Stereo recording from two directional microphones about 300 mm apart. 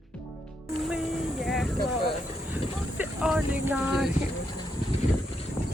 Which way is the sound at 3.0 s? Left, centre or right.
Centre.